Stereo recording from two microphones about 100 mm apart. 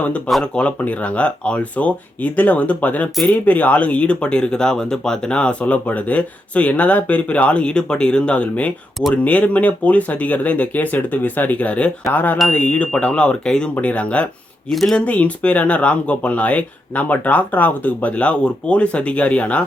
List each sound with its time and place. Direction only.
0.3 s speech: 5° left (ahead or behind)
14.7 s speech: centre (ahead or behind)
15.0 s speech: 15° left (ahead or behind)